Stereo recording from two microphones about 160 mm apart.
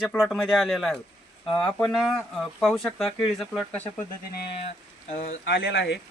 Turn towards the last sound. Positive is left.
turn(degrees=90)